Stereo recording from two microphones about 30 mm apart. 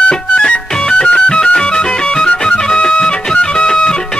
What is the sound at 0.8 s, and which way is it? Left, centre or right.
Music, left.